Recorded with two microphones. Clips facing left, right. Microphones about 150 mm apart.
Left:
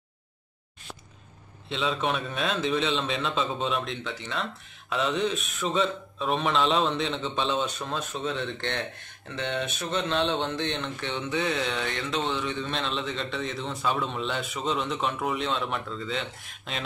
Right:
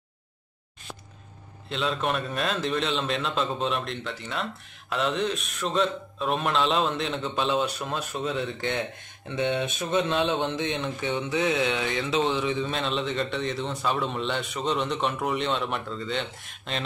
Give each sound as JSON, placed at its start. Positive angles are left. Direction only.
{"t": 1.7, "sound": "a man's voice", "side_deg": 0}